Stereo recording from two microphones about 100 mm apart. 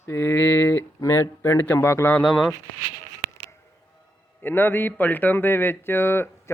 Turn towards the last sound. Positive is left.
turn(degrees=25)  # may be behind; listen again after turning